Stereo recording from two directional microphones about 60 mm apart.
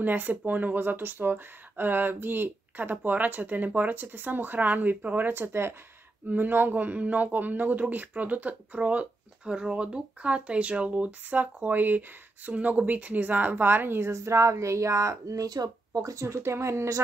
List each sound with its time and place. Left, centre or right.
0.0 s speech: right
6.2 s a woman's voice: right